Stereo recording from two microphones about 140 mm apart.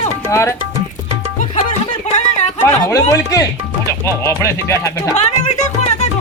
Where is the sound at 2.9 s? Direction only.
20° left (ahead or behind).